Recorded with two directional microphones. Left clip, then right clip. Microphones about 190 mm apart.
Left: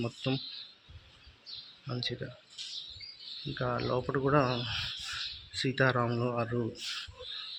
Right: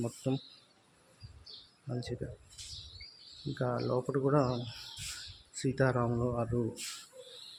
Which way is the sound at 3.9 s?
5° left (ahead or behind).